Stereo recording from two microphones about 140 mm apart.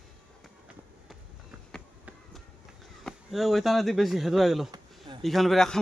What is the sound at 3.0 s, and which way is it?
Speech, centre (ahead or behind).